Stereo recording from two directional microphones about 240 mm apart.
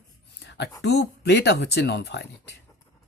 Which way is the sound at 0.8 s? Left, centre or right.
Left.